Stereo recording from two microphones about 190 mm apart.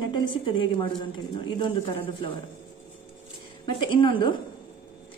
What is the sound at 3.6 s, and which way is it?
Speech, 25° left (ahead or behind).